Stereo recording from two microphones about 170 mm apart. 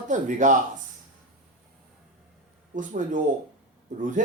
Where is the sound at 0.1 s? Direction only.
45° right (ahead or behind).